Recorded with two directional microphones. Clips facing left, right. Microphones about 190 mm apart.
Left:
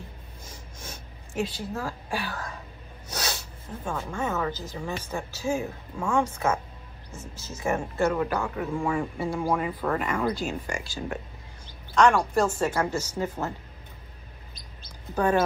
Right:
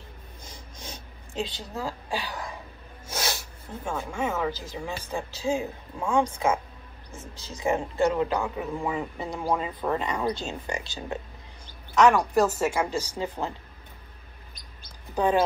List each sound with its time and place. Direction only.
0.7 s speech: 15° right (ahead or behind)
3.8 s speech: 10° right (ahead or behind)
11.6 s a sound: 5° right (ahead or behind)
12.4 s speech: 5° right (ahead or behind)
15.1 s speech: 15° right (ahead or behind)